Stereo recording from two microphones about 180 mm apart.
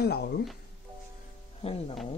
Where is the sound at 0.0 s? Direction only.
65° left (ahead or behind).